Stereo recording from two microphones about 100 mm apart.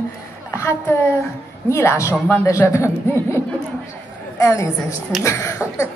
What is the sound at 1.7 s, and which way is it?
A woman's voice, 30° left (ahead or behind).